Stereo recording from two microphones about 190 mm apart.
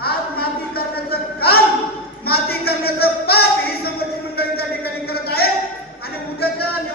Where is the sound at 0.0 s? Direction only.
55° left (ahead or behind).